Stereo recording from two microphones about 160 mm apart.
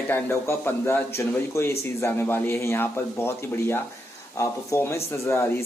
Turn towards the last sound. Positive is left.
turn(degrees=15)  # may be behind; listen again after turning